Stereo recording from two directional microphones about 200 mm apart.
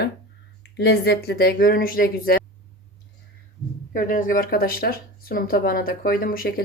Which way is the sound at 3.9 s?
40° left (ahead or behind).